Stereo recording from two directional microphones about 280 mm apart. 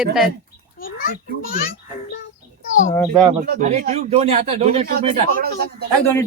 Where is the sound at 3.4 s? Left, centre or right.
Right.